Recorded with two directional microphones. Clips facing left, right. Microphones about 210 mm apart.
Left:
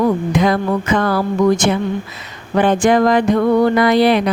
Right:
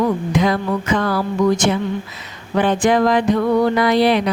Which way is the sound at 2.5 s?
50° left (ahead or behind).